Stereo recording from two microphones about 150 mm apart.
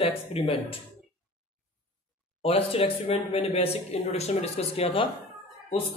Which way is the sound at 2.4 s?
40° left (ahead or behind).